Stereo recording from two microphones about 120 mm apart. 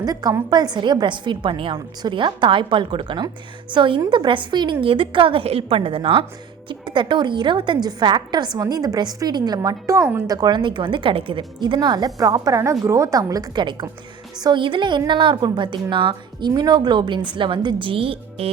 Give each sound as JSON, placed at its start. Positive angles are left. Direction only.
{"t": 0.0, "sound": "a woman's voice", "side_deg": -30}